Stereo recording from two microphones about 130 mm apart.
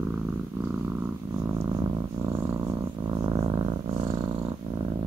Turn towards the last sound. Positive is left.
turn(degrees=-40)  # may be behind; listen again after turning